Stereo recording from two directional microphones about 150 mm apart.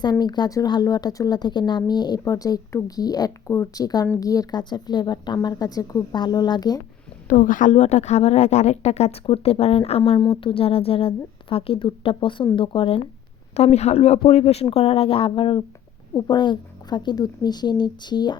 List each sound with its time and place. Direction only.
0.0 s speech: 25° left (ahead or behind)
7.3 s a woman's voice: 60° left (ahead or behind); by 10.0 s 45° left (ahead or behind)
10.0 s a woman's voice: 30° left (ahead or behind)
13.5 s a woman's voice: 45° left (ahead or behind); by 18.3 s 30° left (ahead or behind)